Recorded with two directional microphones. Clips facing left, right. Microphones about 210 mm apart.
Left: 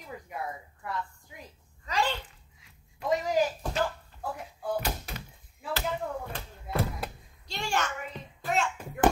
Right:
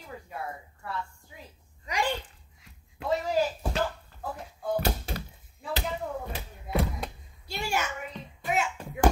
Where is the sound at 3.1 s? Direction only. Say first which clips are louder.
Even; 15° left (ahead or behind).